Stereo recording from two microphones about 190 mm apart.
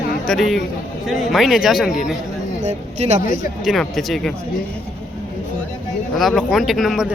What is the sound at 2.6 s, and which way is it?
Speech, 35° right (ahead or behind).